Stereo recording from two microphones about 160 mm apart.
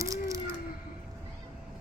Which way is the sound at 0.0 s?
20° right (ahead or behind).